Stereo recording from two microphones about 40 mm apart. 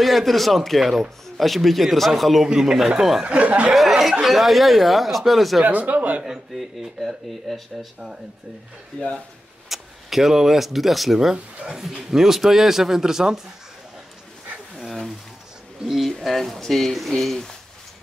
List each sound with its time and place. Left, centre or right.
0.0 s speech: centre
2.4 s a man's voice: centre
3.3 s speech: right
4.0 s speech: centre
5.7 s speech: right
6.2 s a man's voice: centre
7.4 s speech: centre
8.9 s speech: left
9.7 s speech: centre
11.6 s a man's voice: centre
14.9 s speech: centre